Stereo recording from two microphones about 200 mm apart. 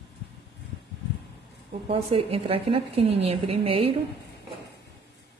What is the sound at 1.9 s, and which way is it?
A woman's voice, 30° right (ahead or behind).